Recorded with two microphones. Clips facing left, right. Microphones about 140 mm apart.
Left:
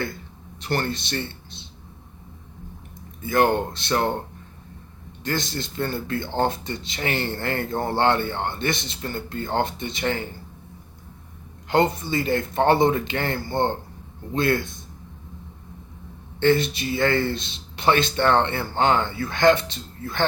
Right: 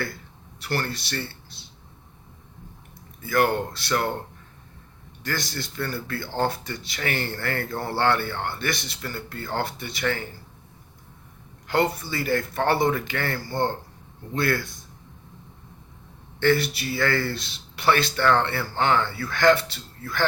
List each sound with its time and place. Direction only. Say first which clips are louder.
0.6 s speech: left 3 dB; 25° left (ahead or behind)
3.2 s speech: left 2 dB; 20° left (ahead or behind)
5.2 s speech: left 3 dB; 20° left (ahead or behind)
11.7 s speech: left 3 dB; 20° left (ahead or behind)
16.4 s speech: left 2 dB; 20° left (ahead or behind)